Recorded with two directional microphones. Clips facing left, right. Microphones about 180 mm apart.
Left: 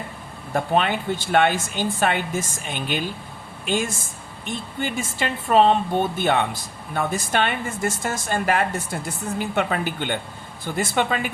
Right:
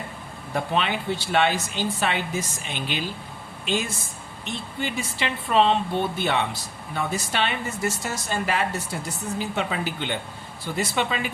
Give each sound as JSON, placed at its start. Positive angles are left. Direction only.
{"t": 0.5, "sound": "speech", "side_deg": 50}
{"t": 4.4, "sound": "speech", "side_deg": 50}